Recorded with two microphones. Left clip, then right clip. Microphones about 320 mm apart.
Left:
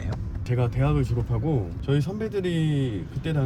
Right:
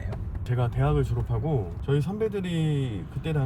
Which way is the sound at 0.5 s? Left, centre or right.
Centre.